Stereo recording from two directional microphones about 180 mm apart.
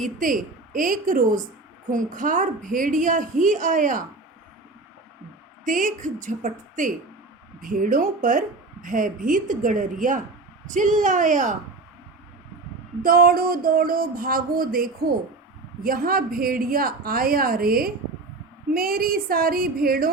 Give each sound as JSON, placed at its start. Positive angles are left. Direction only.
{"t": 0.2, "sound": "a woman's voice", "side_deg": -50}
{"t": 5.6, "sound": "a woman's voice", "side_deg": -45}
{"t": 13.0, "sound": "a woman's voice", "side_deg": -50}